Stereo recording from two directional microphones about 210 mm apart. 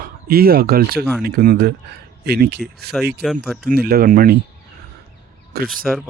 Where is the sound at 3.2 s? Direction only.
Centre (ahead or behind).